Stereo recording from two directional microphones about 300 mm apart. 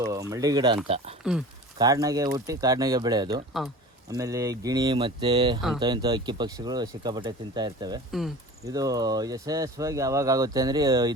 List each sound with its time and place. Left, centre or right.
0.1 s speech: centre
1.2 s speech: centre
3.5 s speech: centre
4.1 s speech: centre